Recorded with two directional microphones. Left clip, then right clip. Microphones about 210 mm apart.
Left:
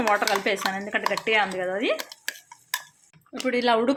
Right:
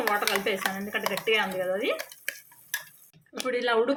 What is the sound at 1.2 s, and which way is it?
Speech, 55° left (ahead or behind).